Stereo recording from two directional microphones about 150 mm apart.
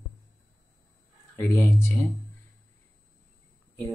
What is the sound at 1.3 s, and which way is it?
Speech, 20° left (ahead or behind).